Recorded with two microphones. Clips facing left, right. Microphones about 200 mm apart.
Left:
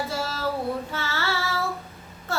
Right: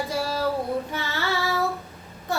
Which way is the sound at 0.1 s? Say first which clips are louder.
Right 3 dB; 15° right (ahead or behind).